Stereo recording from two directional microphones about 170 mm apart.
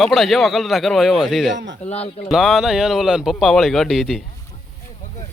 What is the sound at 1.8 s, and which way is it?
Speech, 40° left (ahead or behind).